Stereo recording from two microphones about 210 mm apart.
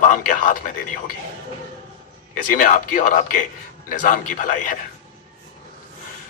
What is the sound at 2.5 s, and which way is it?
Speech, 40° left (ahead or behind).